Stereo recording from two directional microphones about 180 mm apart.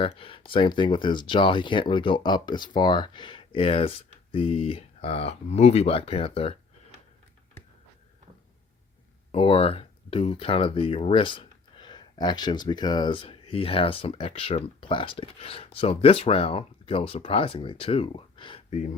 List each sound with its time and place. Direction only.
0.0 s speech: 30° left (ahead or behind)
9.3 s speech: 30° left (ahead or behind)